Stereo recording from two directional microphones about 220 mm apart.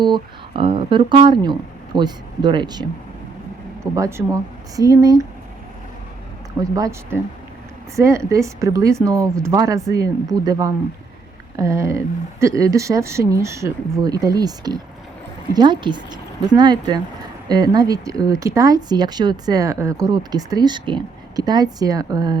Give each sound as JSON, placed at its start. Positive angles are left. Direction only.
{"t": 0.0, "sound": "speech", "side_deg": -20}
{"t": 3.9, "sound": "speech", "side_deg": -15}
{"t": 6.7, "sound": "speech", "side_deg": -15}